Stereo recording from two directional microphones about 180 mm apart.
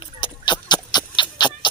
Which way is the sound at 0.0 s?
25° left (ahead or behind).